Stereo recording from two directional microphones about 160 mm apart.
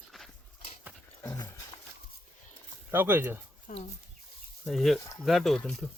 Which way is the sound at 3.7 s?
65° left (ahead or behind).